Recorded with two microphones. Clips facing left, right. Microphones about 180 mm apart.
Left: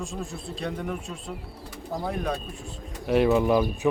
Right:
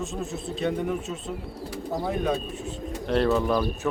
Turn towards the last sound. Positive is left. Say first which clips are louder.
# left 2 dB
turn(degrees=15)  # may be behind; listen again after turning